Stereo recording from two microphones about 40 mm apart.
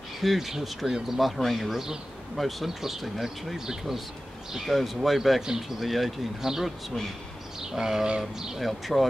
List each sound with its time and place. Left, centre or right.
0.2 s speech: centre
1.7 s speech: centre
2.3 s speech: centre
6.4 s speech: centre
8.6 s speech: centre